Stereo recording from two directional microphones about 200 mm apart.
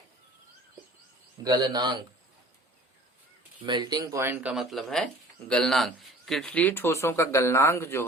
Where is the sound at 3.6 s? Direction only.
20° right (ahead or behind).